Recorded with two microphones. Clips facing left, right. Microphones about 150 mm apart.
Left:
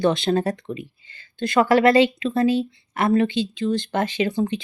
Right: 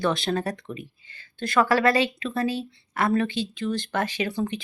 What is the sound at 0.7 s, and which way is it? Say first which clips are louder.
Speech: left 5 dB; 35° left (ahead or behind).